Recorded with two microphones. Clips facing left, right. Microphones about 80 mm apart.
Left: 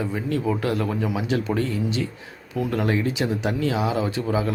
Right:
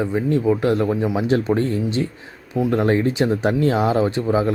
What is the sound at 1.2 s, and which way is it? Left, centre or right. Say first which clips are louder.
A man's voice: right 6 dB; right.